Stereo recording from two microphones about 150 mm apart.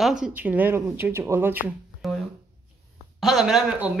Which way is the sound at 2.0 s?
Centre (ahead or behind).